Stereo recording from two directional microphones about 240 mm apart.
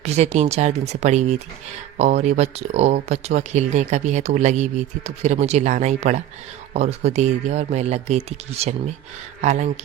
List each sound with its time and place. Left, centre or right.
0.0 s speech: right